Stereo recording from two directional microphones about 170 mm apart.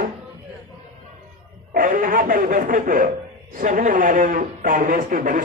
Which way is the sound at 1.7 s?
55° right (ahead or behind).